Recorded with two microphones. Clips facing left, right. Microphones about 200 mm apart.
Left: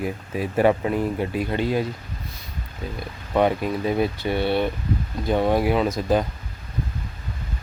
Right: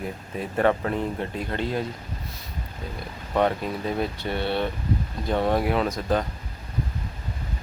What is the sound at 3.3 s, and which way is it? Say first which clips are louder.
Speech: left 3 dB; 5° left (ahead or behind).